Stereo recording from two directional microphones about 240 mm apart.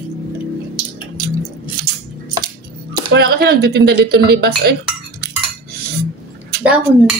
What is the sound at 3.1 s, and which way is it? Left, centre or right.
Speech, right.